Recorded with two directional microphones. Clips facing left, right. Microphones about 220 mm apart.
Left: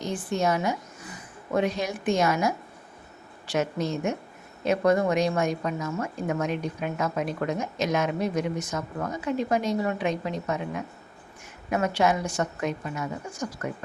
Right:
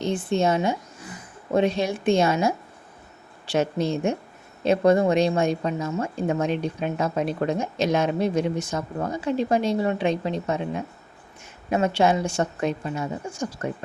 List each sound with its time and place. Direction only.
0.0 s a woman's voice: 25° right (ahead or behind)